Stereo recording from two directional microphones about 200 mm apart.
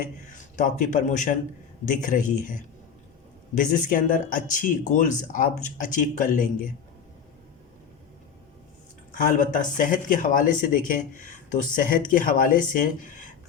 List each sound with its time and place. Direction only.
0.5 s speech: 40° left (ahead or behind)
9.1 s speech: 40° left (ahead or behind)